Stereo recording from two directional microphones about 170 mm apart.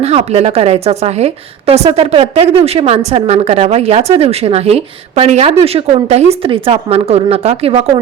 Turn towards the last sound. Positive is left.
turn(degrees=-35)  # may be behind; listen again after turning